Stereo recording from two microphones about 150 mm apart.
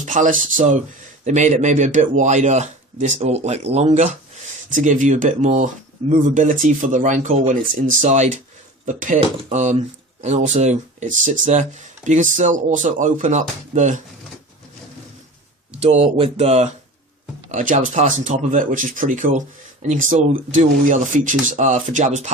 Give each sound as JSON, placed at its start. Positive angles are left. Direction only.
{"t": 0.0, "sound": "speech", "side_deg": -60}
{"t": 15.8, "sound": "speech", "side_deg": -40}
{"t": 17.5, "sound": "speech", "side_deg": -55}